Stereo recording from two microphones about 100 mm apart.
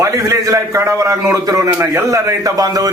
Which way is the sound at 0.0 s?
30° right (ahead or behind).